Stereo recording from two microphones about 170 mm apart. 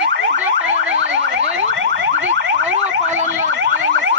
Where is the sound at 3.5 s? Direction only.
90° right.